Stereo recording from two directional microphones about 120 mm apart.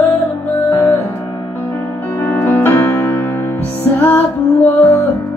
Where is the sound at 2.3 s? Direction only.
15° left (ahead or behind).